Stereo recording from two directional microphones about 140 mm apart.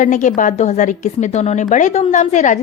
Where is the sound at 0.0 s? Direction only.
65° left (ahead or behind).